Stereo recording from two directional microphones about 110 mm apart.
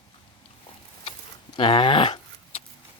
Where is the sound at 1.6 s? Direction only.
50° left (ahead or behind).